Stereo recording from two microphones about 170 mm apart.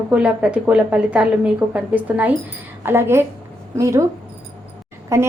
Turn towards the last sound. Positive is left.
turn(degrees=-15)  # may be behind; listen again after turning